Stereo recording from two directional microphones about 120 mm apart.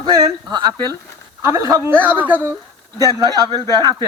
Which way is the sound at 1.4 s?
25° right (ahead or behind).